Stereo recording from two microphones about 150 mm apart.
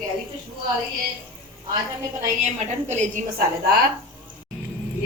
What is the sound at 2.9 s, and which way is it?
Speech, 55° right (ahead or behind).